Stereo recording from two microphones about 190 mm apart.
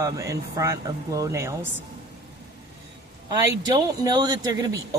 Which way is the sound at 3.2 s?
20° right (ahead or behind).